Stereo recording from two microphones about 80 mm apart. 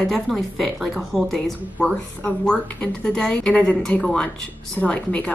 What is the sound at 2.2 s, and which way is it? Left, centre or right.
A woman's voice, centre.